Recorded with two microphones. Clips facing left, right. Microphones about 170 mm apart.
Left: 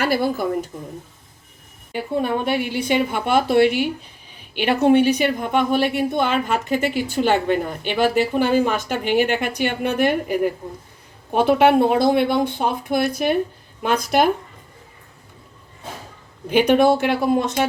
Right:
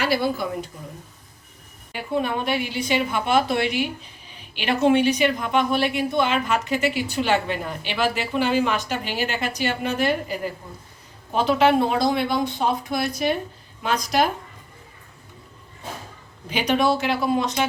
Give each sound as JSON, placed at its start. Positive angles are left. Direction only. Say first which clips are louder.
{"t": 0.0, "sound": "a woman's voice", "louder": "left 2 dB", "side_deg": 50}
{"t": 1.9, "sound": "a woman's voice", "louder": "left 3 dB", "side_deg": 50}
{"t": 16.5, "sound": "a woman's voice", "louder": "left 6 dB", "side_deg": 55}